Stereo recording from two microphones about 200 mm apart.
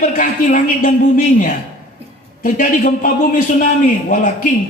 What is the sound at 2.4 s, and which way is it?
A man's voice, 40° left (ahead or behind).